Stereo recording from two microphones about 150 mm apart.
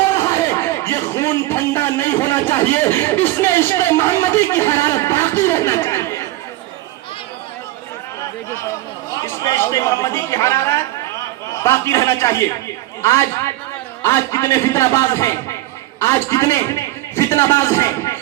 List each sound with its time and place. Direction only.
0.1 s speech: 20° left (ahead or behind)
9.2 s a man's voice: 20° left (ahead or behind)